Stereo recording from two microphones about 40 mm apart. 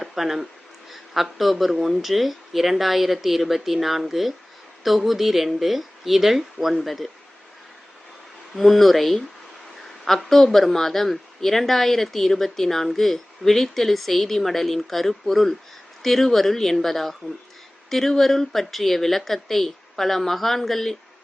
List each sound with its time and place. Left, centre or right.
0.0 s speech: centre
8.5 s speech: centre